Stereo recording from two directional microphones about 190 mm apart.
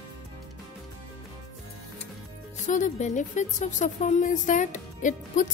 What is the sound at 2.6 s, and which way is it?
A woman's voice, 40° left (ahead or behind).